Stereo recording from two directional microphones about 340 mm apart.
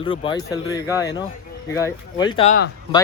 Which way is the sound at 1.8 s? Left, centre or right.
Centre.